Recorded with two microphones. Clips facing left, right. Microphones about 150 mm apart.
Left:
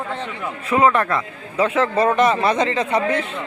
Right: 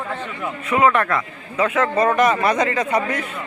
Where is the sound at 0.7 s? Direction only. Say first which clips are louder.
Left 1 dB; 30° left (ahead or behind).